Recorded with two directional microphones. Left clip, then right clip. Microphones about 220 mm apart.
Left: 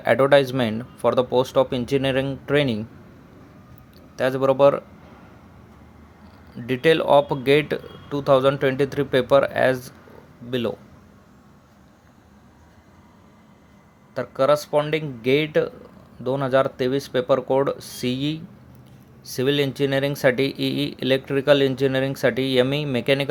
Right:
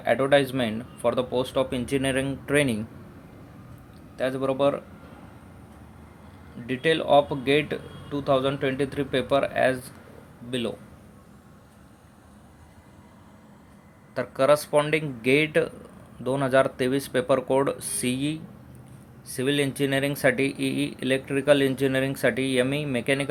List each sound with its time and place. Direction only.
0.0 s speech: 25° left (ahead or behind)
4.2 s speech: 25° left (ahead or behind)
6.7 s speech: 25° left (ahead or behind)
14.1 s speech: 10° left (ahead or behind)